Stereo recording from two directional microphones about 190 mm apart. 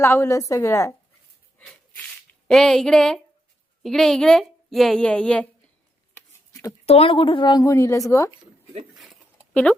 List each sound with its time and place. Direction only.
0.0 s a woman's voice: 15° left (ahead or behind)
2.5 s a woman's voice: centre (ahead or behind)
6.5 s a sound: 15° left (ahead or behind)
6.8 s speech: 30° left (ahead or behind)
9.5 s speech: 5° left (ahead or behind)